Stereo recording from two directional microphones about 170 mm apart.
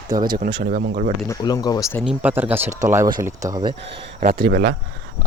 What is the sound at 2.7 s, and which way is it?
Speech, 50° right (ahead or behind).